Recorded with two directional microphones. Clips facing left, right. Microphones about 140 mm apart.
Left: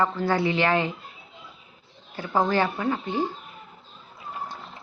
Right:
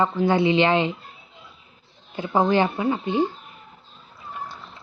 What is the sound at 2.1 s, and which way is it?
A woman's voice, 20° right (ahead or behind).